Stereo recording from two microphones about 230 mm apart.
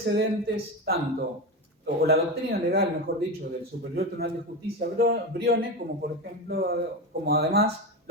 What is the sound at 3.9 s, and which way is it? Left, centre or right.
Speech, right.